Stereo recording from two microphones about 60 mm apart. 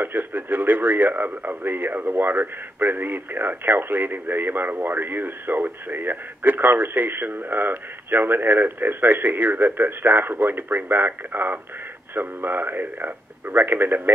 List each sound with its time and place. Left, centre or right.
0.0 s speech: right